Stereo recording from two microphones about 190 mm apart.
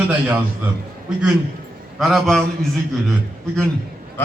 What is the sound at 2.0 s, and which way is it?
Speech, centre (ahead or behind).